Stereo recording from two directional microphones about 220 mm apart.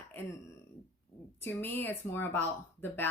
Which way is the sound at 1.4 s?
10° left (ahead or behind).